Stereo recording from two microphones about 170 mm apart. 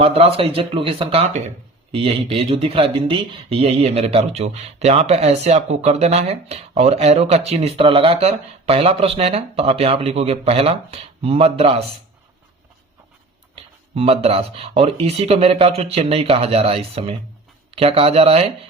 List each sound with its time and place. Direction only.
0.0 s speech: 35° right (ahead or behind)
13.9 s speech: 35° right (ahead or behind)